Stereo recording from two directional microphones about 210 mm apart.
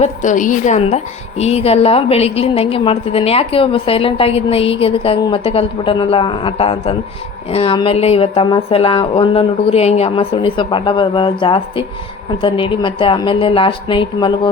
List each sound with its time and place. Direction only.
0.0 s a woman's voice: 35° left (ahead or behind)